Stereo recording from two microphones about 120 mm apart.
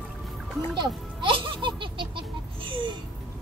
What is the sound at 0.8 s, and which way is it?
Music, 45° right (ahead or behind).